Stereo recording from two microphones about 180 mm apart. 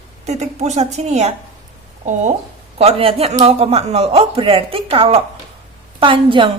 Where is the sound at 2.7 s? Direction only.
30° right (ahead or behind).